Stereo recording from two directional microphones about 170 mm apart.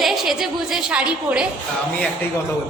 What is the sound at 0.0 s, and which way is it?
A woman's voice, centre (ahead or behind).